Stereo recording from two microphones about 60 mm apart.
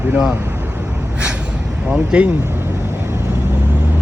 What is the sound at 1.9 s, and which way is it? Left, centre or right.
Vehicle, centre.